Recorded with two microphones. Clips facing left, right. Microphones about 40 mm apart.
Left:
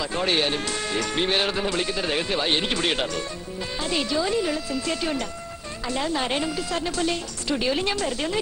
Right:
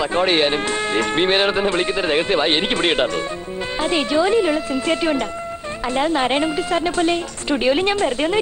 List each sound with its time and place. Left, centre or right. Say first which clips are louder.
0.0 s speech: right 7 dB; right